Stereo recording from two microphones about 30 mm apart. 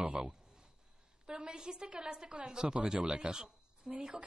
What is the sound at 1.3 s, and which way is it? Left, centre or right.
A woman's voice, right.